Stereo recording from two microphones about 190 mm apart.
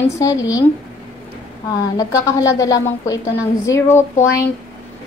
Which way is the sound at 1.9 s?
15° left (ahead or behind).